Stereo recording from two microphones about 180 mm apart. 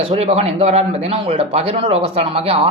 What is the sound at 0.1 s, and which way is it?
Speech, 35° right (ahead or behind).